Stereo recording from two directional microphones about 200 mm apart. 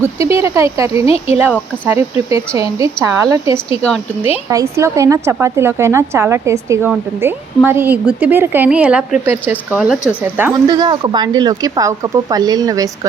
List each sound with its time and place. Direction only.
0.0 s speech: 15° right (ahead or behind)
1.0 s speech: 30° left (ahead or behind)
1.8 s speech: 10° right (ahead or behind)
10.5 s speech: 20° right (ahead or behind)